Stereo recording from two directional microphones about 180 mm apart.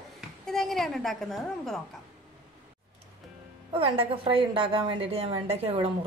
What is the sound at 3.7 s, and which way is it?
A woman's voice, 30° right (ahead or behind).